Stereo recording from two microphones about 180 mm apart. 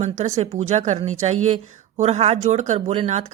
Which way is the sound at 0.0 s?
40° right (ahead or behind).